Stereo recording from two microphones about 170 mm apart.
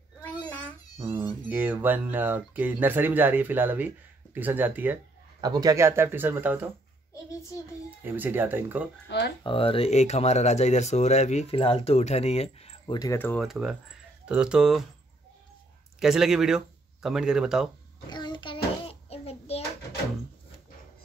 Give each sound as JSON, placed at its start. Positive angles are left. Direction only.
{"t": 0.5, "sound": "babbling", "side_deg": 10}
{"t": 0.9, "sound": "a sound", "side_deg": -15}
{"t": 1.5, "sound": "speech", "side_deg": -10}
{"t": 5.4, "sound": "speech", "side_deg": -25}
{"t": 8.0, "sound": "speech", "side_deg": -10}
{"t": 9.4, "sound": "speech", "side_deg": 30}
{"t": 13.2, "sound": "speech", "side_deg": 10}
{"t": 13.5, "sound": "speech", "side_deg": -5}
{"t": 16.0, "sound": "speech", "side_deg": 0}
{"t": 18.1, "sound": "child singing", "side_deg": 25}